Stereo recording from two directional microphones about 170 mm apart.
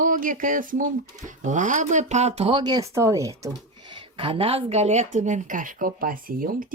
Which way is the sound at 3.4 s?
25° right (ahead or behind).